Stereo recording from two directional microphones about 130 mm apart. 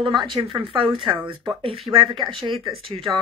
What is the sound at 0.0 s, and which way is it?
Speech, 35° right (ahead or behind).